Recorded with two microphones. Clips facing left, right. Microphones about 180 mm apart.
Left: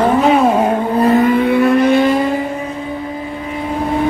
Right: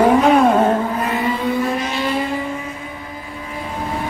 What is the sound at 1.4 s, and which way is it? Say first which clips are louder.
Vehicle: left 8 dB; 65° left (ahead or behind).